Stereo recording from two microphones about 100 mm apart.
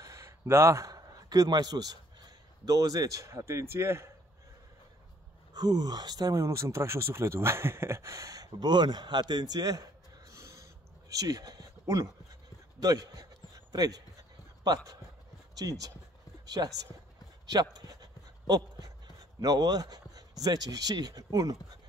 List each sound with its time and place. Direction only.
0.0 s a man's voice: 30° right (ahead or behind)
5.5 s speech: 45° right (ahead or behind)
12.8 s a sound: 40° right (ahead or behind)
15.5 s speech: 35° right (ahead or behind)
17.5 s a sound: 40° right (ahead or behind)
19.4 s speech: 40° right (ahead or behind)